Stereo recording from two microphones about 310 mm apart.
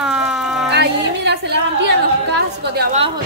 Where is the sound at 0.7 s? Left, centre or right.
Right.